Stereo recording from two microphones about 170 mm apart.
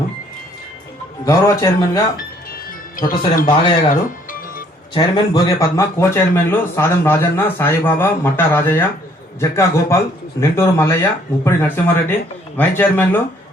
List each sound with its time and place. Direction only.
1.2 s speech: 20° left (ahead or behind)
2.9 s speech: 55° left (ahead or behind)
4.9 s speech: 25° left (ahead or behind)